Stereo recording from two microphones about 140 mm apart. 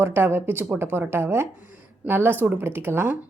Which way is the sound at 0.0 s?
15° right (ahead or behind).